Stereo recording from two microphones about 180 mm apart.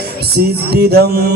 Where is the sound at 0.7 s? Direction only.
60° right (ahead or behind).